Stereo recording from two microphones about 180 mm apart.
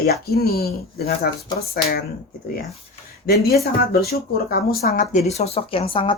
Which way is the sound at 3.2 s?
60° left (ahead or behind).